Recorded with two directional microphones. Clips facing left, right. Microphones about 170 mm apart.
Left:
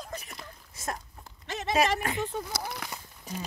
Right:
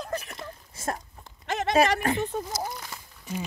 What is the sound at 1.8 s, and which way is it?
Speech, 45° right (ahead or behind).